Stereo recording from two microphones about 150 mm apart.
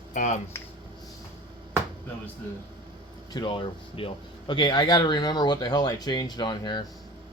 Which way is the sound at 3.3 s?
35° left (ahead or behind).